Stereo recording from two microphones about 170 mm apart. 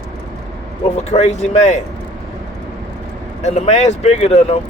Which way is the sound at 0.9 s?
40° left (ahead or behind).